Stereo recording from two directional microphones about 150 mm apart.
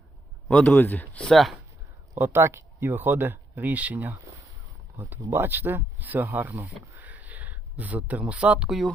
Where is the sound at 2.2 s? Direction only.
15° right (ahead or behind).